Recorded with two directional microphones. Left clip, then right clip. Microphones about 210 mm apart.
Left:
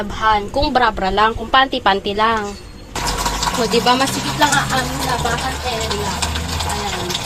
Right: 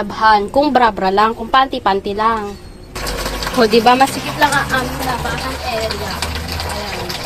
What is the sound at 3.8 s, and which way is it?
Speech, 50° right (ahead or behind).